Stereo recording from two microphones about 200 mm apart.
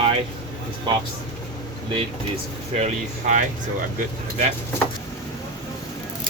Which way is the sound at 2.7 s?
35° right (ahead or behind).